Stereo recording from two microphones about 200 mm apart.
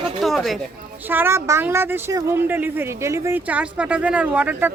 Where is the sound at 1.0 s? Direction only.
10° right (ahead or behind).